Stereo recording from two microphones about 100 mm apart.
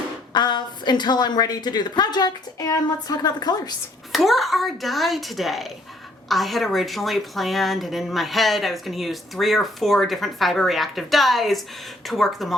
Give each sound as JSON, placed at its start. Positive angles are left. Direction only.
{"t": 0.3, "sound": "a woman's voice", "side_deg": 45}
{"t": 4.1, "sound": "a woman's voice", "side_deg": 0}